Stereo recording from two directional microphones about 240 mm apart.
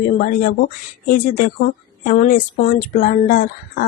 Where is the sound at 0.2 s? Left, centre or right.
Left.